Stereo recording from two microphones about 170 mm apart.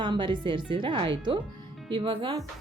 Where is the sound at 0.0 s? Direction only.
25° right (ahead or behind).